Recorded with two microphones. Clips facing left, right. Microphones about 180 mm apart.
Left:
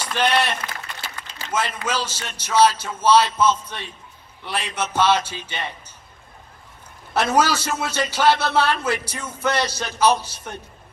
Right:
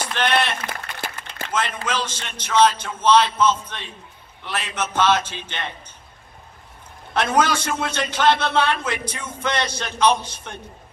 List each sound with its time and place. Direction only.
0.1 s run: 10° left (ahead or behind)
0.7 s a sound: 55° right (ahead or behind)
1.5 s a man's voice: 10° left (ahead or behind)
7.1 s a man's voice: 10° left (ahead or behind)